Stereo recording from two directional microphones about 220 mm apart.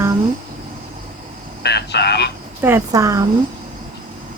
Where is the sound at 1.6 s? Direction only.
50° left (ahead or behind).